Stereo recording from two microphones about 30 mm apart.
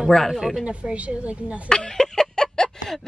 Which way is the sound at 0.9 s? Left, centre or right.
Right.